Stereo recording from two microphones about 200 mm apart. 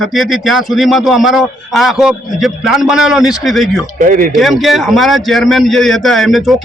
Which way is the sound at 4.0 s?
45° right (ahead or behind).